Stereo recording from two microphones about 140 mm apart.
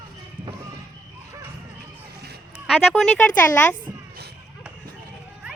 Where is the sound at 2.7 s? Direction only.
5° left (ahead or behind).